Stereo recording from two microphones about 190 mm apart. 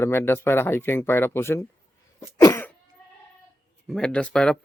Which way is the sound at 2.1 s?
15° left (ahead or behind).